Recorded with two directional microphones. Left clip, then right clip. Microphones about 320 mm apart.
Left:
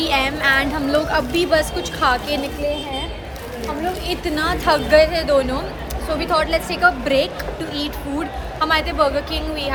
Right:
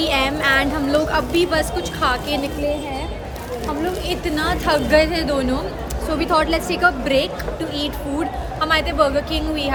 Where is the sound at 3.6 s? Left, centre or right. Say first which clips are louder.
Even; centre.